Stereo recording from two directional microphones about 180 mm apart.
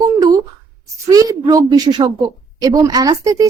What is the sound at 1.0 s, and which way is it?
A woman's voice, 20° right (ahead or behind).